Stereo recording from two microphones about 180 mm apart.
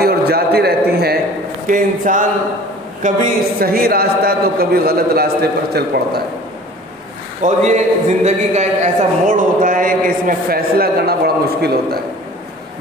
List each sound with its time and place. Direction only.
0.0 s a sound: 60° right (ahead or behind)
1.7 s a man's voice: 45° right (ahead or behind)
3.5 s a man's voice: 55° right (ahead or behind)
7.4 s a man's voice: 40° right (ahead or behind); by 12.0 s 60° right (ahead or behind)